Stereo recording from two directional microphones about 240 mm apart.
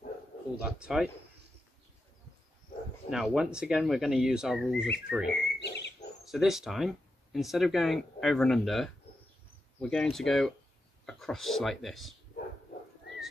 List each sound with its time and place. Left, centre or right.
0.6 s speech: centre
3.1 s speech: centre
5.2 s a sound: left
6.2 s speech: centre